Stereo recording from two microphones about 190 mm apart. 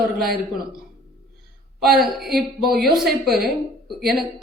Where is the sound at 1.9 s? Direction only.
Centre (ahead or behind).